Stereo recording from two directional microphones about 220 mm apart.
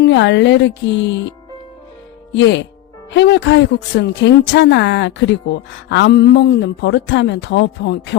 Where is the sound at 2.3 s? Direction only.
55° left (ahead or behind).